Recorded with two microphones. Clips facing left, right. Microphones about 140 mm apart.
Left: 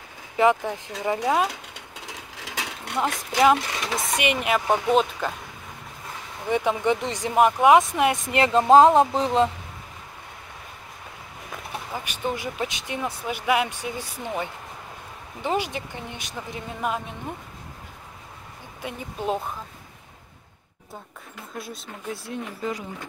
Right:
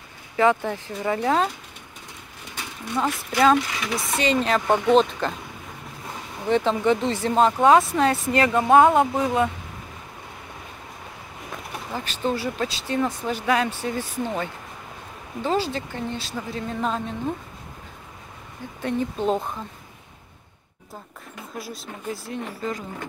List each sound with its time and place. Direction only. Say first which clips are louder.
0.7 s speech: right 1 dB; 15° left (ahead or behind)
1.5 s a sound: left 3 dB; 90° left
3.3 s speech: right 1 dB; 15° left (ahead or behind)
6.5 s speech: right 2 dB; 10° left (ahead or behind)
11.9 s speech: right 4 dB; 15° left (ahead or behind)
18.8 s speech: right 8 dB; 10° left (ahead or behind)
21.5 s speech: right 1 dB; centre (ahead or behind)